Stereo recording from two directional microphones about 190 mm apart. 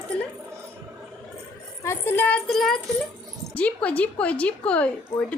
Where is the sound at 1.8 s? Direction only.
10° left (ahead or behind).